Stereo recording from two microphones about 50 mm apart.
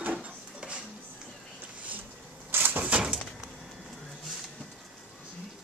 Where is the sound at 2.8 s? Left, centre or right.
Right.